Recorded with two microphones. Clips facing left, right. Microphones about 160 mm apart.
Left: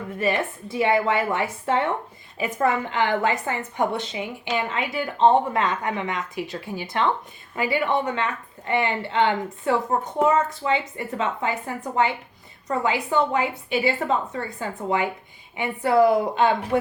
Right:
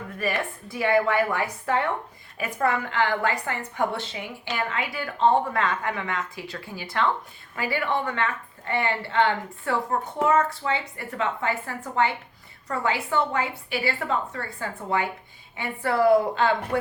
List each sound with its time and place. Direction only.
0.2 s a woman's voice: 20° left (ahead or behind)